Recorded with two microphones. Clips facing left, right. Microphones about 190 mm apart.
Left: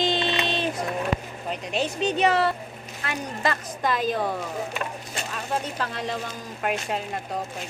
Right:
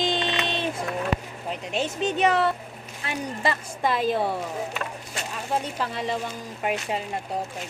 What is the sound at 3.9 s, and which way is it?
Speech, 25° right (ahead or behind).